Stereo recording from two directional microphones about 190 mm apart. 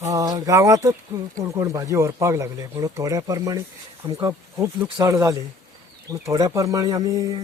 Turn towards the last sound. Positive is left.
turn(degrees=-20)  # may be behind; listen again after turning